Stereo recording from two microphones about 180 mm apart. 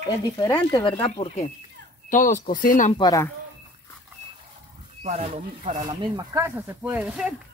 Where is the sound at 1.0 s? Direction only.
35° left (ahead or behind).